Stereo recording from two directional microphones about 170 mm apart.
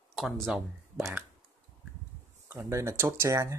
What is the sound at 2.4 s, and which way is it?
Speech, 15° right (ahead or behind).